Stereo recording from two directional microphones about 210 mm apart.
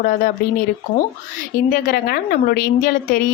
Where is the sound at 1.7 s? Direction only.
45° left (ahead or behind).